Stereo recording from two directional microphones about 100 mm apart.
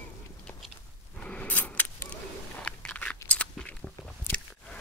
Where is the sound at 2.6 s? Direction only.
10° left (ahead or behind).